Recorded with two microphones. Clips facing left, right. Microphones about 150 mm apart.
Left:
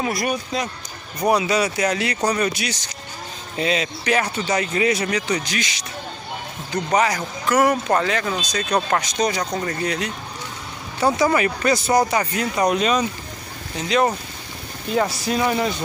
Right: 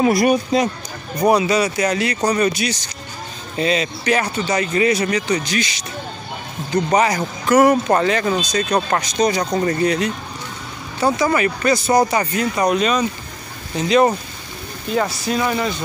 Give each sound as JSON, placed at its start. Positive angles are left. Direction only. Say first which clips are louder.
{"t": 0.0, "sound": "speech", "louder": "right 8 dB", "side_deg": -15}
{"t": 1.2, "sound": "speech", "louder": "right 3 dB", "side_deg": 0}
{"t": 6.9, "sound": "speech", "louder": "right 1 dB", "side_deg": -10}
{"t": 9.4, "sound": "speech", "louder": "right 6 dB", "side_deg": -15}
{"t": 9.8, "sound": "speech", "louder": "right 6 dB", "side_deg": 5}
{"t": 11.1, "sound": "speech", "louder": "right 1 dB", "side_deg": 10}
{"t": 11.9, "sound": "speech", "louder": "right 3 dB", "side_deg": -5}
{"t": 13.7, "sound": "speech", "louder": "right 5 dB", "side_deg": -5}
{"t": 15.0, "sound": "speech", "louder": "right 1 dB", "side_deg": 10}